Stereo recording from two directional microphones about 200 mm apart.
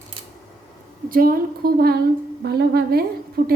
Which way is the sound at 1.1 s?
45° right (ahead or behind).